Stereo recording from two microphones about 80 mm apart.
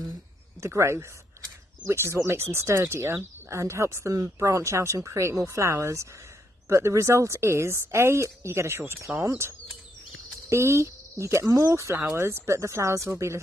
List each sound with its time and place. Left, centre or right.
0.6 s speech: right
10.5 s speech: right